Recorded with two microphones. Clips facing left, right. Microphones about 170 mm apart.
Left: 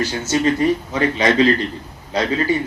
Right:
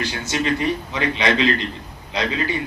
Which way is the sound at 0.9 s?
40° left (ahead or behind).